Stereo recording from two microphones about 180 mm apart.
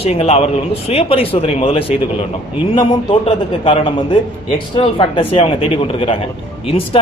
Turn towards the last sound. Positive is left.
turn(degrees=30)  # may be behind; listen again after turning